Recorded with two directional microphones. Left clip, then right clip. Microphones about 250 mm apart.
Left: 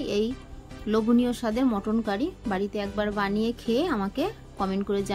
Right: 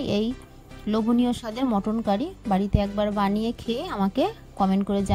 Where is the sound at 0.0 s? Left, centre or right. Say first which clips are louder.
Right 1 dB; right.